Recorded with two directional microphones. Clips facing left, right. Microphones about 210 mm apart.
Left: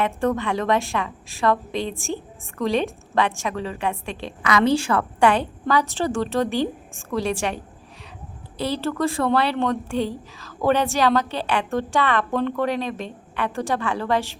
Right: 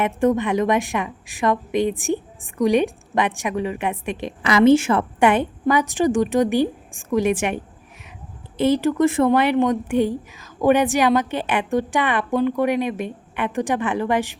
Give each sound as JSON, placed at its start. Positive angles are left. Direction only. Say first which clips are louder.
{"t": 0.0, "sound": "a woman's voice", "louder": "right 4 dB", "side_deg": -20}